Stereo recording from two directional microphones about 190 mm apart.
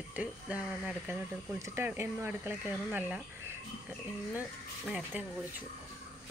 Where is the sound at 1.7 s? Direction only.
10° right (ahead or behind).